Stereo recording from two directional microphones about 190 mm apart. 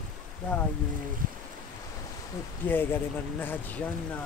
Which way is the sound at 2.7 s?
10° left (ahead or behind).